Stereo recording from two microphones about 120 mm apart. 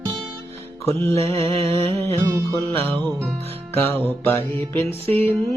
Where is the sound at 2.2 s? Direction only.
20° right (ahead or behind).